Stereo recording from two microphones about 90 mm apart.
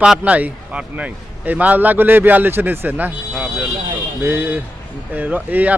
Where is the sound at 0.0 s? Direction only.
10° right (ahead or behind).